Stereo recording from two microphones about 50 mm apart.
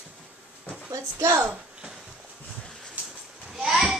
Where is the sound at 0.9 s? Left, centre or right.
Right.